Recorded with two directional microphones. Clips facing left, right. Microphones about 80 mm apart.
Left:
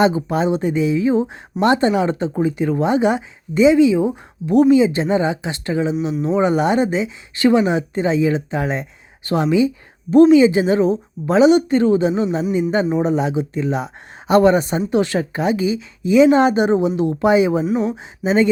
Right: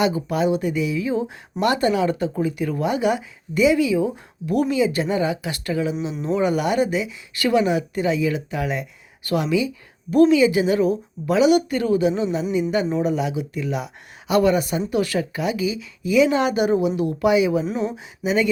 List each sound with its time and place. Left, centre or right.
0.0 s speech: left
17.7 s speech: centre
17.9 s speech: left